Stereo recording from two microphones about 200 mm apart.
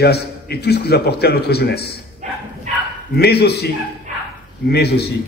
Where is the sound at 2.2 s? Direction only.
35° right (ahead or behind).